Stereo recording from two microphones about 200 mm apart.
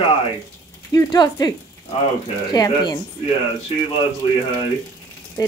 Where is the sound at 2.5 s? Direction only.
20° left (ahead or behind).